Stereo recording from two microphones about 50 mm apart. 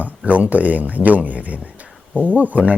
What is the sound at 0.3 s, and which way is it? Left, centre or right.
Speech, right.